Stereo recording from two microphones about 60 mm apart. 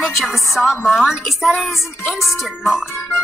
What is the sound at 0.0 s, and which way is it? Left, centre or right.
A woman's voice, centre.